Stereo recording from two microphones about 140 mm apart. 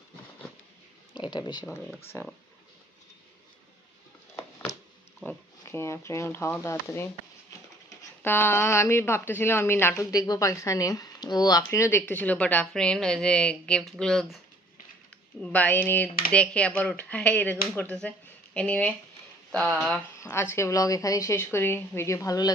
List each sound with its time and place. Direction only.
1.1 s speech: 30° left (ahead or behind)
2.1 s speech: 20° left (ahead or behind)
4.4 s a sound: 20° left (ahead or behind)
5.2 s speech: 15° left (ahead or behind)
8.2 s speech: 15° left (ahead or behind)
15.4 s speech: 10° left (ahead or behind)
20.2 s a woman's voice: 20° left (ahead or behind)